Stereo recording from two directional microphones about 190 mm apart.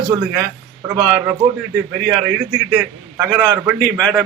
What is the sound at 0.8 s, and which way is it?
Speech, 15° right (ahead or behind).